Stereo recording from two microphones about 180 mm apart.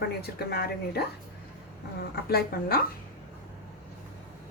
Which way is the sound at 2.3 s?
55° left (ahead or behind).